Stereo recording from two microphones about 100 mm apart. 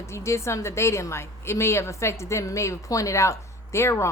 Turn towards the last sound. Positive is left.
turn(degrees=25)  # may be behind; listen again after turning